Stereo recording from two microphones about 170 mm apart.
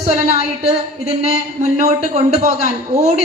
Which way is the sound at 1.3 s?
40° right (ahead or behind).